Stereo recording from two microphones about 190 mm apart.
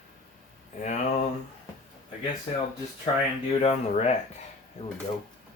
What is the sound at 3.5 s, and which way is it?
Speech, 35° left (ahead or behind).